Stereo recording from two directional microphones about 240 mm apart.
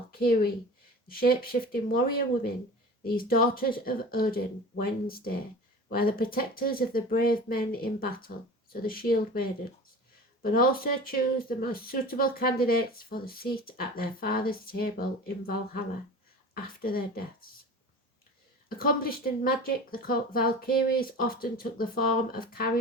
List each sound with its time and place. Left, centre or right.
0.1 s speech: left
18.8 s speech: left